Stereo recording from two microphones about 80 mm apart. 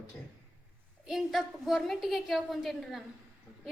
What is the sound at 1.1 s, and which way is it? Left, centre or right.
A woman's voice, centre.